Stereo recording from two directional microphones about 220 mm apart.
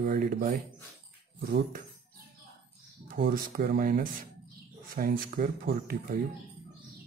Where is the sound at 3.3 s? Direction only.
40° right (ahead or behind).